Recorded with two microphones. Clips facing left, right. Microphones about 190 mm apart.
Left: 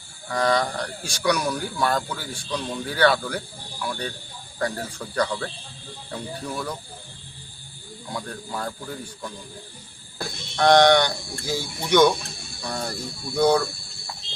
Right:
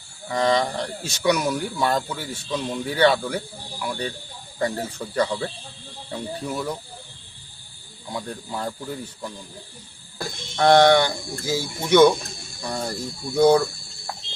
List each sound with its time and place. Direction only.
0.3 s speech: 20° right (ahead or behind)
2.5 s speech: 10° right (ahead or behind)
2.9 s speech: 20° right (ahead or behind)
5.1 s speech: 10° right (ahead or behind)
6.1 s speech: 20° right (ahead or behind)
8.1 s speech: 15° right (ahead or behind)
10.2 s speech: 5° right (ahead or behind)